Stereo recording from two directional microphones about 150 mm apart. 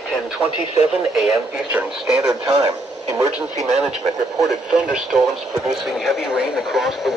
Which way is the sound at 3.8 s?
Centre (ahead or behind).